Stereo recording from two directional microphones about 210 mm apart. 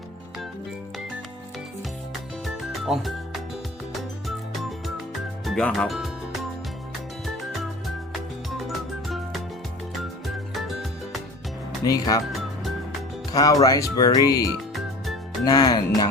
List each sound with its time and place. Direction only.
2.4 s music: centre (ahead or behind)
5.5 s speech: centre (ahead or behind)
8.5 s music: centre (ahead or behind)
11.9 s speech: 15° left (ahead or behind)
13.3 s speech: 15° left (ahead or behind)
14.8 s music: centre (ahead or behind)
15.4 s speech: 20° left (ahead or behind)